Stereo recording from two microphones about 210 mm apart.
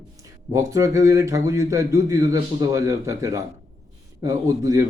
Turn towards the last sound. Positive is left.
turn(degrees=-15)  # may be behind; listen again after turning